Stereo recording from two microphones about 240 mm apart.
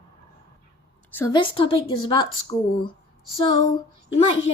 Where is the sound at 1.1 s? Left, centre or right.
Centre.